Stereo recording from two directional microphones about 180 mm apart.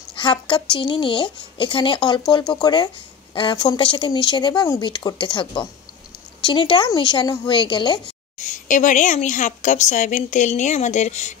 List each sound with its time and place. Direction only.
0.1 s speech: 25° left (ahead or behind)
8.4 s a woman's voice: 45° left (ahead or behind)